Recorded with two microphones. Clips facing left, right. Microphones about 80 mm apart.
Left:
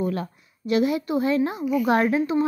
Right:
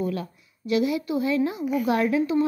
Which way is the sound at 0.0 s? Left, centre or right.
Left.